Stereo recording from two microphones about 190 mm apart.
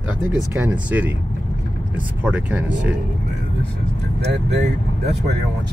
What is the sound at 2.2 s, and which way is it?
Speech, 5° right (ahead or behind).